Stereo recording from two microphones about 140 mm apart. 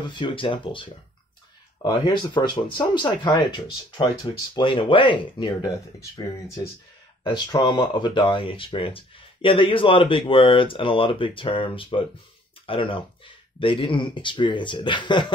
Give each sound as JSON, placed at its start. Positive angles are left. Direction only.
{"t": 0.1, "sound": "speech", "side_deg": 35}
{"t": 5.9, "sound": "speech", "side_deg": 20}
{"t": 7.2, "sound": "speech", "side_deg": 30}